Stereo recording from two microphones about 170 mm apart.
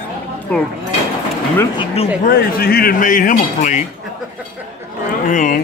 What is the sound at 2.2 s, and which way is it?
Speech, 65° left (ahead or behind).